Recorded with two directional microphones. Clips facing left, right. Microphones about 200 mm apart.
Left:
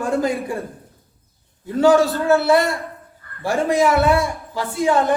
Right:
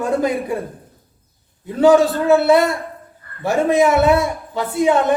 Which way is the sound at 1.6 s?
20° right (ahead or behind).